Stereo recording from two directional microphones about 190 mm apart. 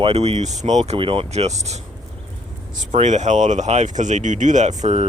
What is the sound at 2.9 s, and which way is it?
Speech, 40° right (ahead or behind).